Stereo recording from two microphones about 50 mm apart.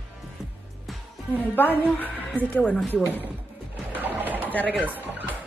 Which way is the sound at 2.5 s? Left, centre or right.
Left.